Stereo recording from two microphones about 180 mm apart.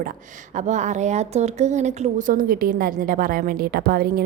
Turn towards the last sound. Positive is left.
turn(degrees=-55)  # may be behind; listen again after turning